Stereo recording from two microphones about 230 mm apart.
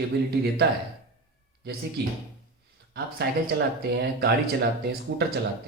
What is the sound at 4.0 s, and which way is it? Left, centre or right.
Speech, right.